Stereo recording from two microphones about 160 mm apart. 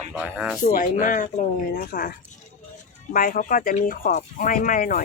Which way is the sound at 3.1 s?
55° left (ahead or behind).